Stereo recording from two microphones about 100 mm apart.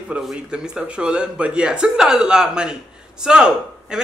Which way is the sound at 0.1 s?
10° right (ahead or behind).